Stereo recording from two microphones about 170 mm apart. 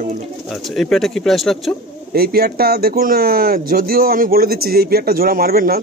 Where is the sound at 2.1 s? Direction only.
65° right (ahead or behind).